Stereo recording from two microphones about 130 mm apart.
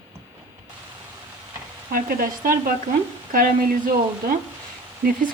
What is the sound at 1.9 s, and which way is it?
Speech, 90° right.